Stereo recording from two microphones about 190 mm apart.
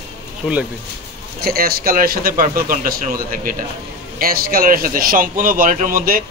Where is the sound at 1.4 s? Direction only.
55° right (ahead or behind).